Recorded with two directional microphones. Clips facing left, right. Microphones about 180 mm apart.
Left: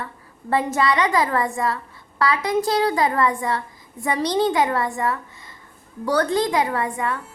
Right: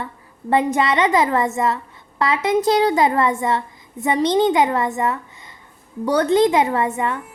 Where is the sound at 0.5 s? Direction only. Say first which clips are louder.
Right 3 dB; 20° right (ahead or behind).